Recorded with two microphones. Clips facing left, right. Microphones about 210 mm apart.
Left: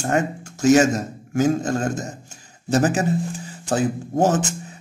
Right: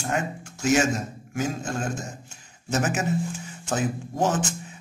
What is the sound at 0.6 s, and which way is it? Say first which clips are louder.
Speech: left 7 dB; 40° left (ahead or behind).